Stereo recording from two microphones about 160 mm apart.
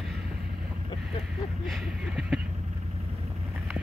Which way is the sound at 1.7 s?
5° right (ahead or behind).